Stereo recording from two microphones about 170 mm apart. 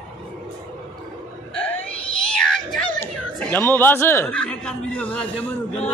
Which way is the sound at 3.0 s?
5° left (ahead or behind).